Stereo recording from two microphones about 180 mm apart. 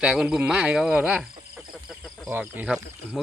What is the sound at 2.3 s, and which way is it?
Speech, 10° right (ahead or behind).